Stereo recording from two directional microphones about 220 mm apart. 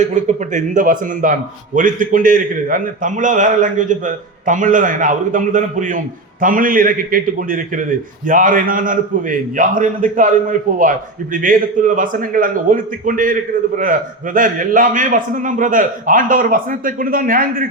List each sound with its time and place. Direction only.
0.0 s a man's voice: 35° right (ahead or behind)